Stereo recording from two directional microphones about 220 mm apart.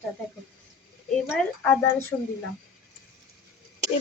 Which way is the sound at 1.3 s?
10° left (ahead or behind).